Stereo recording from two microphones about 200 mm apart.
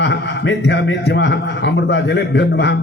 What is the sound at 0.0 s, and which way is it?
A man's voice, 60° left (ahead or behind).